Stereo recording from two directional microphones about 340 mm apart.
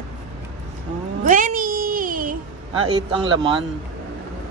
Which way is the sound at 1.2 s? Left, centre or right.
Right.